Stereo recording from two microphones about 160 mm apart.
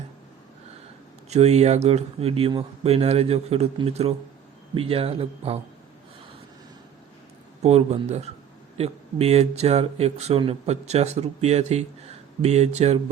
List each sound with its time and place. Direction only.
1.3 s speech: 45° right (ahead or behind)
7.6 s speech: 40° right (ahead or behind)